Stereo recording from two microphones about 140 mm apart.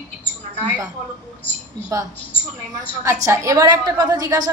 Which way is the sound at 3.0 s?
20° right (ahead or behind).